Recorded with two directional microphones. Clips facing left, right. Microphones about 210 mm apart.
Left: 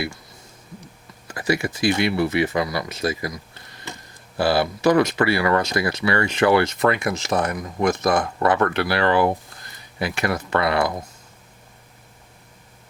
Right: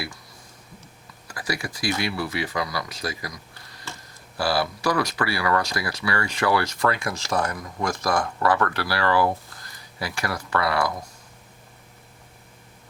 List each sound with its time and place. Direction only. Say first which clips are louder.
1.3 s speech: left 7 dB; 25° left (ahead or behind)